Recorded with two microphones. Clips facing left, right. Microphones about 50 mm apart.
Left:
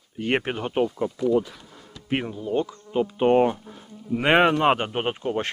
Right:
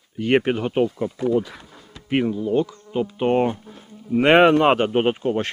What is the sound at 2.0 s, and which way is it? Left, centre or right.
Speech, centre.